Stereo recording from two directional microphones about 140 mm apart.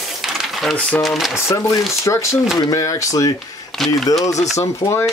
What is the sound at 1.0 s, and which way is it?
Speech, centre (ahead or behind).